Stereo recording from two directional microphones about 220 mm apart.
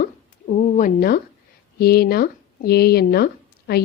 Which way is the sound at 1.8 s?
45° left (ahead or behind).